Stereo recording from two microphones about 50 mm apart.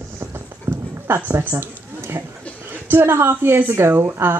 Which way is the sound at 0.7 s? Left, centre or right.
Right.